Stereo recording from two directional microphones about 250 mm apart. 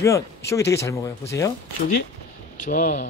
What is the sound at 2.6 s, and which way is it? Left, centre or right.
Speech, left.